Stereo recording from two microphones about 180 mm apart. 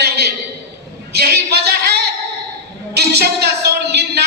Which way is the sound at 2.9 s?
65° right (ahead or behind).